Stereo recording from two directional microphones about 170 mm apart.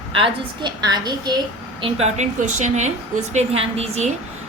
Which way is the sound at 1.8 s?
40° right (ahead or behind).